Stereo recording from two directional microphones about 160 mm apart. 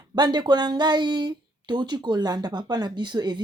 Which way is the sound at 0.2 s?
25° right (ahead or behind).